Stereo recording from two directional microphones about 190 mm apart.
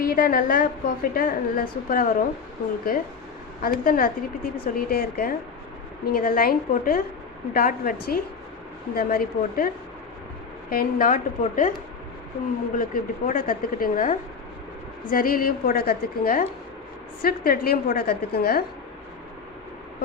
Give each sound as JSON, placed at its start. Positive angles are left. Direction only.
{"t": 0.0, "sound": "a woman's voice", "side_deg": 50}
{"t": 3.6, "sound": "a woman's voice", "side_deg": 50}
{"t": 12.7, "sound": "a woman's voice", "side_deg": 45}